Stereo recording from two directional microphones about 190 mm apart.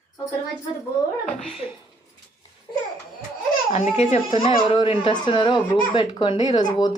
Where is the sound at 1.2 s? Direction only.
Centre (ahead or behind).